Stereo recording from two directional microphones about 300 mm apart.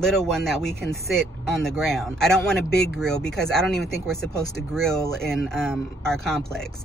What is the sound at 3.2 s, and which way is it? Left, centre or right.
Speech, left.